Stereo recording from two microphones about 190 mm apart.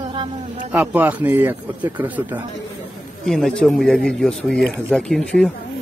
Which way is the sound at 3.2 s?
Centre (ahead or behind).